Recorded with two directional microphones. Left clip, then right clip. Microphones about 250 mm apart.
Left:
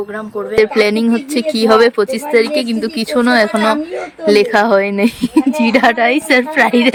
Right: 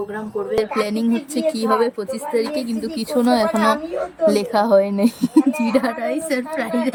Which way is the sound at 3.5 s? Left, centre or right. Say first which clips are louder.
Left 4 dB; centre.